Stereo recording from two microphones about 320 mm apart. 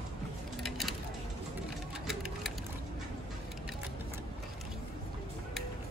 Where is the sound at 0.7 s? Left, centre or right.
Centre.